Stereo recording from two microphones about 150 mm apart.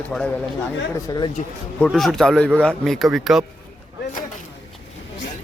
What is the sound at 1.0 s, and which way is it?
Speech, 30° left (ahead or behind).